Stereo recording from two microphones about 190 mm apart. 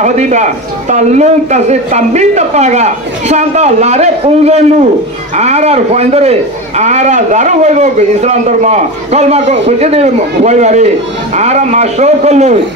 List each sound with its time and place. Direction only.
0.0 s a man's voice: 40° right (ahead or behind)